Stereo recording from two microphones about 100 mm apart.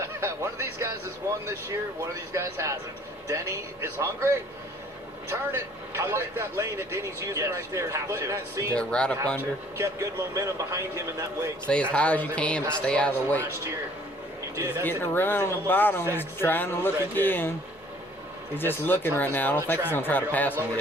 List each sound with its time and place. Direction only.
0.0 s a man's voice: 25° right (ahead or behind)
8.8 s speech: 10° left (ahead or behind)
9.4 s a man's voice: 30° right (ahead or behind)
11.7 s speech: 10° left (ahead or behind)
14.5 s a man's voice: 30° right (ahead or behind)
14.8 s speech: 20° left (ahead or behind)
18.5 s speech: 20° left (ahead or behind)